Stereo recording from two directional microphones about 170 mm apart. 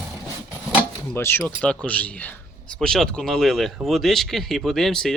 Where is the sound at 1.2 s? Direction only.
15° left (ahead or behind).